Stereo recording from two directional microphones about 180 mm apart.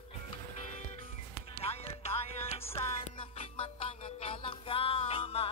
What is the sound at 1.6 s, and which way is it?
Music, 35° left (ahead or behind).